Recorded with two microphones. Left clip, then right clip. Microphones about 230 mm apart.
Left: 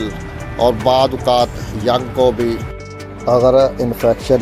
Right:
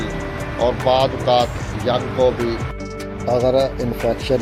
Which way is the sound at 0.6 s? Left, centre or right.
Left.